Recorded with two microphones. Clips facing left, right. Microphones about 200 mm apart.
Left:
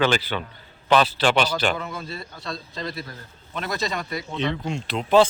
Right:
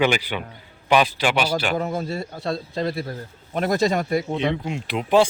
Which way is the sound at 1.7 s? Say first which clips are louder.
Right 8 dB; 45° right (ahead or behind).